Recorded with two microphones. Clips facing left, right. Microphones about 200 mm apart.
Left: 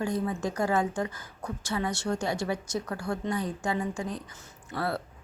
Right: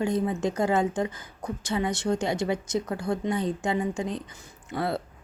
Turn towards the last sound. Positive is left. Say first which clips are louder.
# right 3 dB
turn(degrees=-20)  # may be behind; listen again after turning